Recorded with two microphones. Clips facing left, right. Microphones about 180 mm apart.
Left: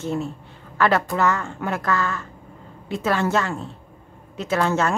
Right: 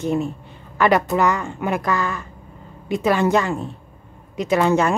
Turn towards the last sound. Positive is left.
turn(degrees=-15)  # may be behind; listen again after turning